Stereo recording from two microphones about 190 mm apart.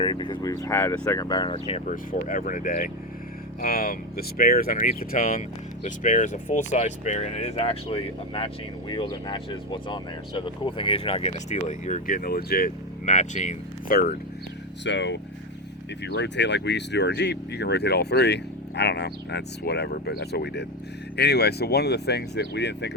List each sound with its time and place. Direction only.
0.0 s speech: 25° left (ahead or behind); by 14.2 s 50° left (ahead or behind)
14.8 s speech: 70° left (ahead or behind)